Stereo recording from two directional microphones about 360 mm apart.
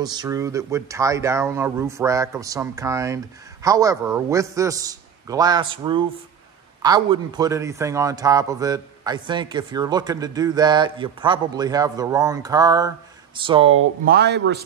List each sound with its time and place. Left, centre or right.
0.0 s speech: centre
14.0 s speech: right